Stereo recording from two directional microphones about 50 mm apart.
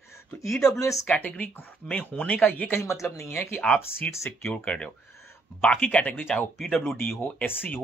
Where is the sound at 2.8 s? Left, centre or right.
Left.